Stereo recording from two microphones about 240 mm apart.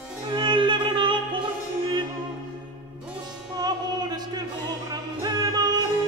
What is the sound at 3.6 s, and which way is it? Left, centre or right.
Music, centre.